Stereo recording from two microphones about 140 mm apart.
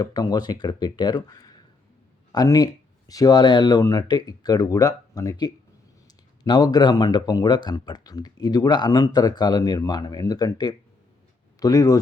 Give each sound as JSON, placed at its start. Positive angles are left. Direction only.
{"t": 0.0, "sound": "speech", "side_deg": 25}